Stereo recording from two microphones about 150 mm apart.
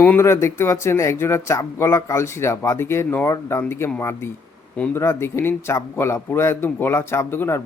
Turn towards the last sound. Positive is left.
turn(degrees=15)  # may be behind; listen again after turning